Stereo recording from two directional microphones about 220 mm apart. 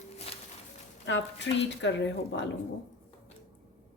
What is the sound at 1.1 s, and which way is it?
Speech, 55° left (ahead or behind).